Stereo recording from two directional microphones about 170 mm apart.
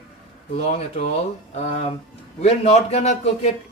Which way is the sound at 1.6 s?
40° left (ahead or behind).